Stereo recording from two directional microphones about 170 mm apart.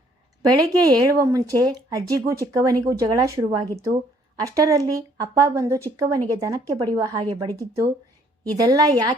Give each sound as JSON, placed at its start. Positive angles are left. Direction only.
{"t": 0.5, "sound": "speech", "side_deg": -20}